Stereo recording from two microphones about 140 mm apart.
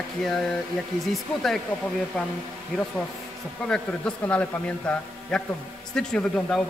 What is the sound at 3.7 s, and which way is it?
A man's voice, 10° left (ahead or behind).